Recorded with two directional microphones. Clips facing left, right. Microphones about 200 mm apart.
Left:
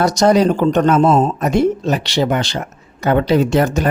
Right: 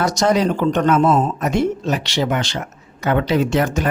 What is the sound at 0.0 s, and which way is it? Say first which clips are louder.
Speech: left 4 dB; 35° left (ahead or behind).